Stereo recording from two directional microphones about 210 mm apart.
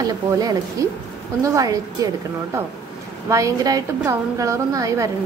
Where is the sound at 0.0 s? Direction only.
20° right (ahead or behind).